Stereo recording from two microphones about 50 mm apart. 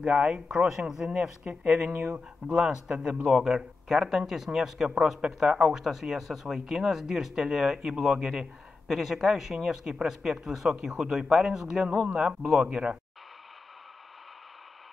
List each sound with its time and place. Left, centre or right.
0.0 s speech: centre
2.4 s speech: centre